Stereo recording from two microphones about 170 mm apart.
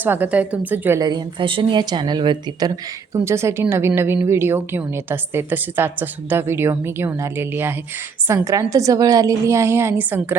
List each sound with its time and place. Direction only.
0.0 s a woman's voice: 10° right (ahead or behind)
1.0 s a woman's voice: 25° right (ahead or behind); by 10.3 s 10° right (ahead or behind)